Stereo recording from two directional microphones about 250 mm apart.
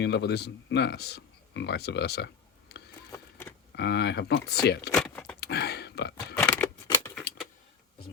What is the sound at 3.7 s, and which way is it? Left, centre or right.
Speech, left.